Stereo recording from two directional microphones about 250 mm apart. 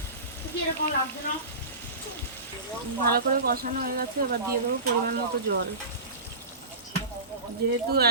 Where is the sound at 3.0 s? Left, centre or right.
Right.